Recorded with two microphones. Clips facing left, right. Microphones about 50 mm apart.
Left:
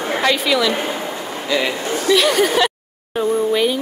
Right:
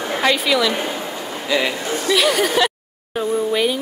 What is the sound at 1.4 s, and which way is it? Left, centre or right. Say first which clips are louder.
Speech: even; centre.